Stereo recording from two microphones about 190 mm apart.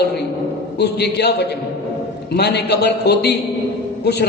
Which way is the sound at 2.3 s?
60° left (ahead or behind).